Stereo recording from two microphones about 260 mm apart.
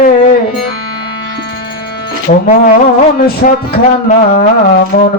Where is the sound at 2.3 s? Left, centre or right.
Left.